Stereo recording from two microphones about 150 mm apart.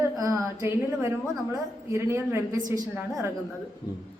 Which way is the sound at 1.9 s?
15° right (ahead or behind).